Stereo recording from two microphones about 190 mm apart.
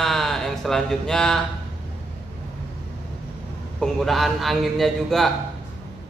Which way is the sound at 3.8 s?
Centre (ahead or behind).